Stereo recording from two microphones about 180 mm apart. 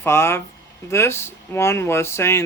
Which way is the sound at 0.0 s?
15° left (ahead or behind).